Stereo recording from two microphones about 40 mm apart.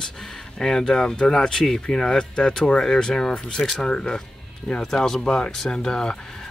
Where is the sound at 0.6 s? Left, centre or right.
Centre.